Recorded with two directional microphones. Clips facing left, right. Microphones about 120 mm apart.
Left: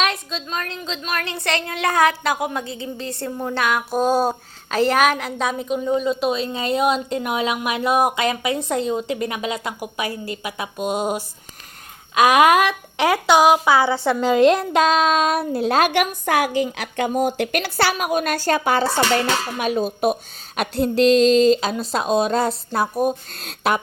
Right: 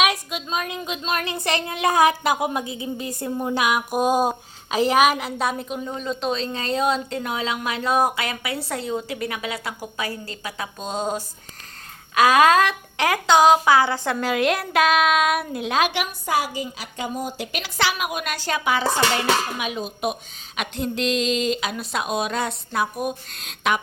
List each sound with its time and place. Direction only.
0.0 s a woman's voice: 10° right (ahead or behind); by 23.8 s 40° left (ahead or behind)